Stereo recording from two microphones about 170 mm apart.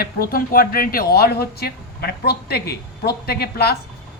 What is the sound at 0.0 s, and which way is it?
A woman's voice, 60° left (ahead or behind).